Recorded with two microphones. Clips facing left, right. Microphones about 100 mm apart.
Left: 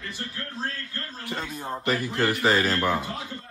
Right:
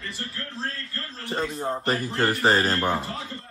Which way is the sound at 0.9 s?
30° right (ahead or behind).